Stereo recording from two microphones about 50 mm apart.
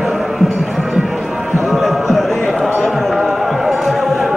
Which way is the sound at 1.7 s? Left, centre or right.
Centre.